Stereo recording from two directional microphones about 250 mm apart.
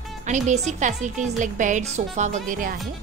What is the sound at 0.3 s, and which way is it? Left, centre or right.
Speech, right.